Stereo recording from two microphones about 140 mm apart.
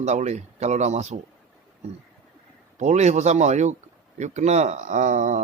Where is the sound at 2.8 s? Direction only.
55° right (ahead or behind).